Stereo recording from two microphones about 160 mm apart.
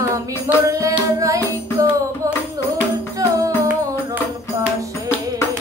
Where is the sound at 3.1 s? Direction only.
20° right (ahead or behind).